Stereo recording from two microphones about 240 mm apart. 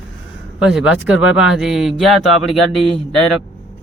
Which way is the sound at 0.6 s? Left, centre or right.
Centre.